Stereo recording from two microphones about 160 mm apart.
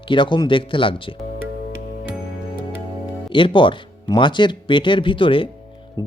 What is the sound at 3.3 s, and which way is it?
Speech, 30° left (ahead or behind).